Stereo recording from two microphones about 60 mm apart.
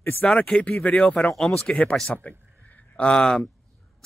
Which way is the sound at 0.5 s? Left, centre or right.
Left.